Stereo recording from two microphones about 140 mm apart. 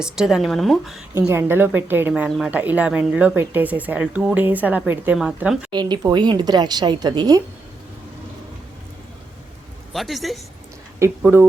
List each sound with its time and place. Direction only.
0.0 s a woman's voice: 5° right (ahead or behind)
1.3 s a woman's voice: 15° right (ahead or behind)
5.7 s a woman's voice: 30° right (ahead or behind)
9.9 s a woman's voice: centre (ahead or behind)
11.2 s a woman's voice: 15° right (ahead or behind)